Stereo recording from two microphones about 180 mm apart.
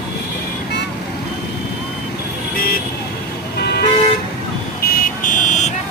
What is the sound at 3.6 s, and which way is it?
Vehicle, 65° left (ahead or behind).